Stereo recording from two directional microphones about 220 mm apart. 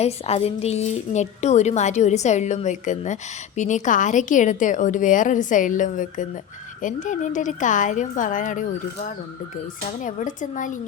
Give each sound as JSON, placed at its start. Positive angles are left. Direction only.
{"t": 0.0, "sound": "a woman's voice", "side_deg": 30}
{"t": 10.0, "sound": "a woman's voice", "side_deg": 35}